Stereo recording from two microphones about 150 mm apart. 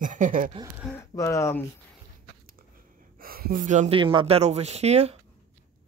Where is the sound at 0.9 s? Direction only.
20° left (ahead or behind).